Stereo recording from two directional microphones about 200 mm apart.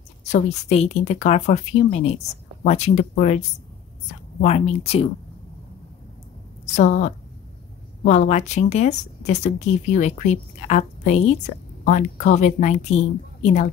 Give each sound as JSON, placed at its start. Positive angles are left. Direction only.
{"t": 0.3, "sound": "a woman's voice", "side_deg": 30}
{"t": 4.4, "sound": "speech", "side_deg": 30}
{"t": 6.6, "sound": "a woman's voice", "side_deg": 35}